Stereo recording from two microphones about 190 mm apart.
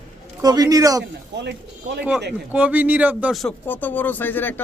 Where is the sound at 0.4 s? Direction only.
20° right (ahead or behind).